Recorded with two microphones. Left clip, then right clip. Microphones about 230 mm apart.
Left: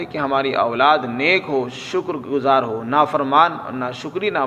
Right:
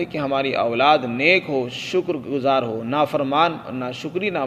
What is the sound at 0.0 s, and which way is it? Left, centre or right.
A man's voice, right.